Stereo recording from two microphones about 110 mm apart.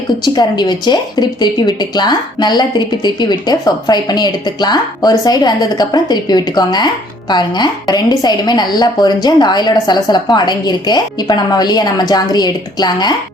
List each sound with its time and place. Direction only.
0.3 s a woman's voice: 40° left (ahead or behind)